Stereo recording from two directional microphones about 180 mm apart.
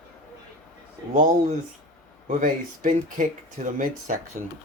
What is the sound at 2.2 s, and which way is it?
Speech, 45° right (ahead or behind).